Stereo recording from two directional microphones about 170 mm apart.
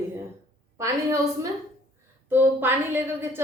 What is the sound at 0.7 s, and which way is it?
A woman's voice, 20° right (ahead or behind).